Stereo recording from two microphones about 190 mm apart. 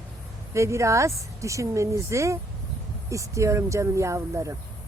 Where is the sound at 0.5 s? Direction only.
15° right (ahead or behind).